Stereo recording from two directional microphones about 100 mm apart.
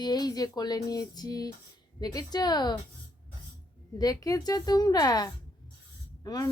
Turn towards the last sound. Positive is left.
turn(degrees=40)  # may be behind; listen again after turning